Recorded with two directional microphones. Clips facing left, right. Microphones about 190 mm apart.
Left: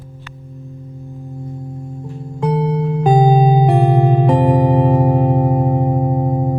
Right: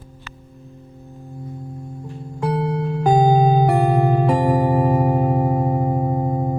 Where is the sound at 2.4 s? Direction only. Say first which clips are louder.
Left 4 dB; 20° left (ahead or behind).